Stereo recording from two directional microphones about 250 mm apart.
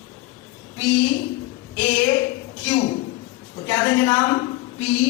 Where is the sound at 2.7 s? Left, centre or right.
Centre.